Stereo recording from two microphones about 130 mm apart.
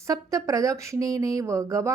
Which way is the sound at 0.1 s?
25° right (ahead or behind).